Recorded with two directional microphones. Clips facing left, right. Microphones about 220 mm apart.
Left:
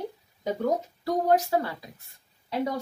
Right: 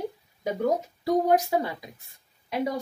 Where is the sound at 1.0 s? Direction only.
15° right (ahead or behind).